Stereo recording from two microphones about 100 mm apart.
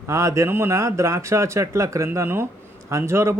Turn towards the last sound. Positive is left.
turn(degrees=-25)  # may be behind; listen again after turning